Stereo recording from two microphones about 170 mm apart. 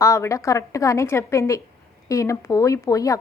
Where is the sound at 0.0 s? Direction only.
20° left (ahead or behind).